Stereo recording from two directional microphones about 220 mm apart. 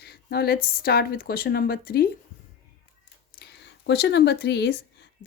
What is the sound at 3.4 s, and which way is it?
Speech, 50° left (ahead or behind).